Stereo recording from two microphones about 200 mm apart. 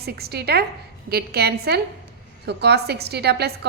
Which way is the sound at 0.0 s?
50° right (ahead or behind).